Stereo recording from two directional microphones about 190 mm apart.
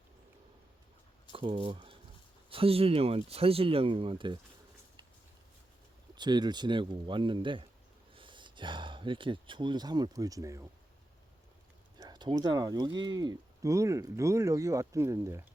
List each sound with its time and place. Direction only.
1.3 s speech: 25° right (ahead or behind)
6.1 s speech: 20° right (ahead or behind)
11.9 s speech: 20° right (ahead or behind)